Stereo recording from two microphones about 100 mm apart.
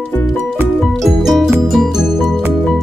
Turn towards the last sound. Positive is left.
turn(degrees=0)  # may be behind; listen again after turning